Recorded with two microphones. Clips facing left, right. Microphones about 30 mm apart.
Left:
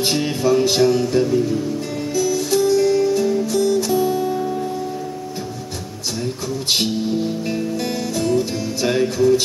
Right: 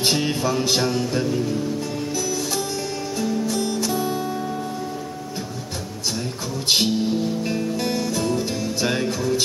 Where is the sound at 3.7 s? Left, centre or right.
Centre.